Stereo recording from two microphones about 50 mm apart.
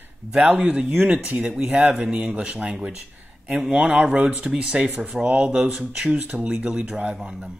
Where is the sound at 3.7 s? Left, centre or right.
Centre.